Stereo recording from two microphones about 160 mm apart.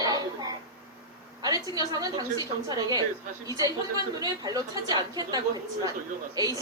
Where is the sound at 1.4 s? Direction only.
25° right (ahead or behind).